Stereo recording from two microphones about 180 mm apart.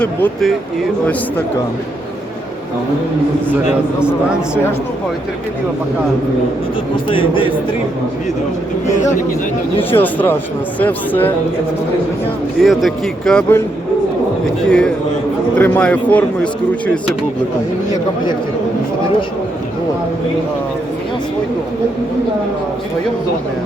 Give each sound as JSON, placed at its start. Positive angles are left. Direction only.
{"t": 0.0, "sound": "speech", "side_deg": 5}
{"t": 4.0, "sound": "speech", "side_deg": -5}
{"t": 6.9, "sound": "speech", "side_deg": 30}
{"t": 9.9, "sound": "speech", "side_deg": 10}
{"t": 12.5, "sound": "speech", "side_deg": 0}
{"t": 14.7, "sound": "speech", "side_deg": 5}